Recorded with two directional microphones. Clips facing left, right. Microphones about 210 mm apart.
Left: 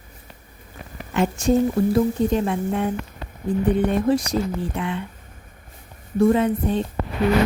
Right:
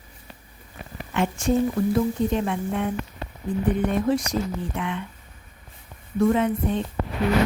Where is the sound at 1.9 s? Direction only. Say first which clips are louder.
Left 3 dB; 35° left (ahead or behind).